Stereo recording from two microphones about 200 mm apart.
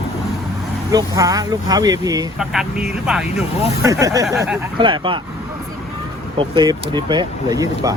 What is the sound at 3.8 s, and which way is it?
Speech, 15° right (ahead or behind).